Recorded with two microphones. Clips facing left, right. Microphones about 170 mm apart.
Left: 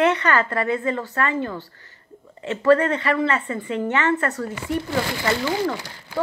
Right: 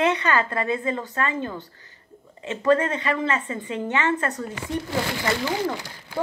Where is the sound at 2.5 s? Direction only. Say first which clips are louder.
Left 3 dB; 20° right (ahead or behind).